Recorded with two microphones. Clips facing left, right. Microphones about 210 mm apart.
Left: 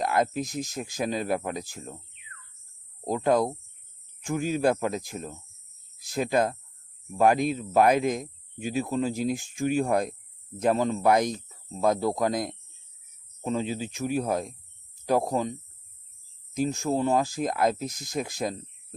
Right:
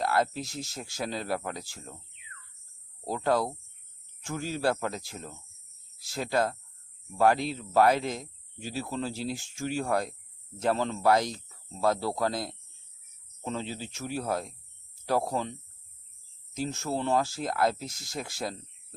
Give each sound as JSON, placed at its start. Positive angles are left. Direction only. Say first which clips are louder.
{"t": 0.0, "sound": "speech", "louder": "left 2 dB", "side_deg": 15}
{"t": 3.0, "sound": "speech", "louder": "left 4 dB", "side_deg": 15}
{"t": 16.6, "sound": "speech", "louder": "left 6 dB", "side_deg": 15}